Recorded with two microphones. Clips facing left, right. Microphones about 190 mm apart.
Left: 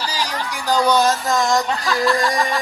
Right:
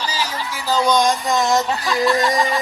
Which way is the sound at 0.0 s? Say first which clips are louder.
Even; 10° left (ahead or behind).